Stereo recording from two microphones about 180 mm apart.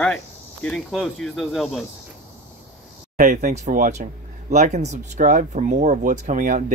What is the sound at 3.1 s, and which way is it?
Speech, 50° right (ahead or behind).